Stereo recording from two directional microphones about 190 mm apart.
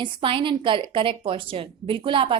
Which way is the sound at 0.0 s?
25° right (ahead or behind).